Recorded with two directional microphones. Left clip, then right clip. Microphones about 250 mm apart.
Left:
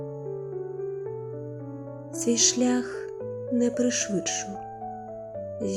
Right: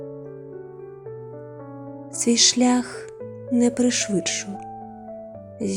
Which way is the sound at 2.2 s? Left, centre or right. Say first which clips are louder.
Right 5 dB; centre.